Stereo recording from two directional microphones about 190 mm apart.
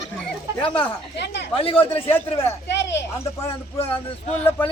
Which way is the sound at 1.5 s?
30° left (ahead or behind).